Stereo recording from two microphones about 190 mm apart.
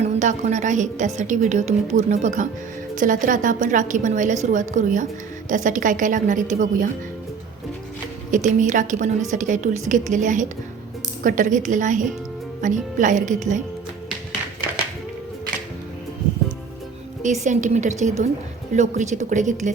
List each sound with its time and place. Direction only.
0.0 s a woman's voice: 40° right (ahead or behind)
8.3 s a woman's voice: 40° right (ahead or behind)
17.4 s a woman's voice: 40° right (ahead or behind)